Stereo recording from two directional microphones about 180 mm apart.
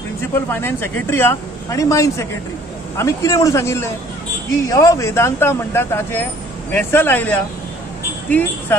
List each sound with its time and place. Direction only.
0.2 s speech: 15° left (ahead or behind)